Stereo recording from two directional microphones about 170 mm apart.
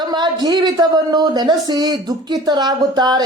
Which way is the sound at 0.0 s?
25° right (ahead or behind).